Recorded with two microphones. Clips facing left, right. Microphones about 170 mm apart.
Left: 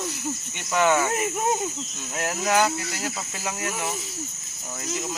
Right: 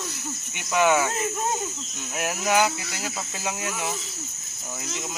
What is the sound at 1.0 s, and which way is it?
Speech, 15° left (ahead or behind).